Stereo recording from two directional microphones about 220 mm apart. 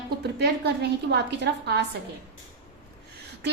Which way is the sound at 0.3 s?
50° right (ahead or behind).